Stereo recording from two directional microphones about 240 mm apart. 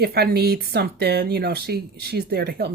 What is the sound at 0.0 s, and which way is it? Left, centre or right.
A woman's voice, right.